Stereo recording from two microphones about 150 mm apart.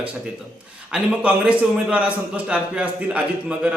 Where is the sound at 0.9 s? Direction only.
10° right (ahead or behind).